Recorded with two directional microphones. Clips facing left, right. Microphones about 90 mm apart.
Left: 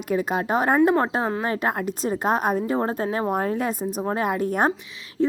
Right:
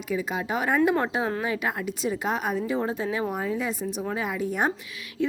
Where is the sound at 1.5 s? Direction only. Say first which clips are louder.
Left 4 dB; 45° left (ahead or behind).